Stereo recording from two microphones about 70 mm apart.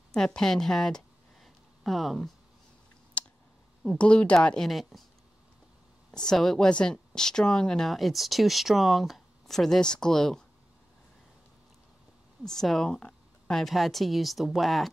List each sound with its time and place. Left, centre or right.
0.1 s speech: centre
3.2 s a sound: centre
4.0 s speech: centre
4.6 s speech: centre
6.1 s speech: centre
12.4 s speech: centre